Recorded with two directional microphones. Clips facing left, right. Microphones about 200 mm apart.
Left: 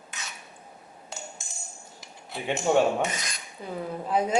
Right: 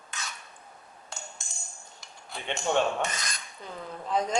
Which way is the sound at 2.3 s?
5° left (ahead or behind).